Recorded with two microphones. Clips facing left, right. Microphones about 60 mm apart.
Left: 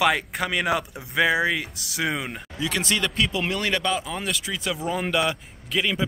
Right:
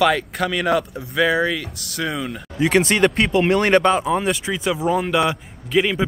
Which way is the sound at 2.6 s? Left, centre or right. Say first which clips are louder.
Right 10 dB; right.